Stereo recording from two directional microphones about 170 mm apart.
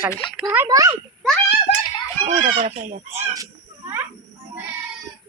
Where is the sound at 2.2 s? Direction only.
40° right (ahead or behind).